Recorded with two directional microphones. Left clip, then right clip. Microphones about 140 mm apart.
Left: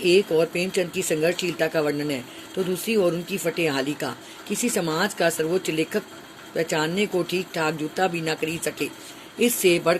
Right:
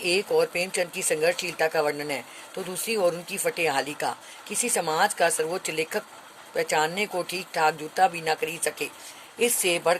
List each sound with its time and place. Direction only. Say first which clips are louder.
0.0 s speech: left 4 dB; 55° right (ahead or behind)